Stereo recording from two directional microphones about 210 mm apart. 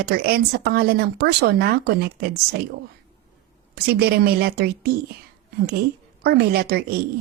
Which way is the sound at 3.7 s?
50° right (ahead or behind).